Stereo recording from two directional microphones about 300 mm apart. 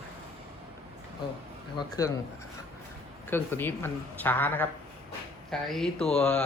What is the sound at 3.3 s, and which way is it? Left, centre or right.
Speech, centre.